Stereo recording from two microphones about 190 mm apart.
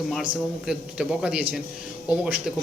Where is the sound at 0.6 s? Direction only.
5° right (ahead or behind).